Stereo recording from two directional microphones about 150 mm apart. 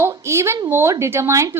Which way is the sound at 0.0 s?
20° right (ahead or behind).